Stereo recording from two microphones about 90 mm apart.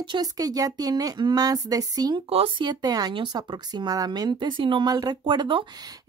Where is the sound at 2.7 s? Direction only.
45° right (ahead or behind).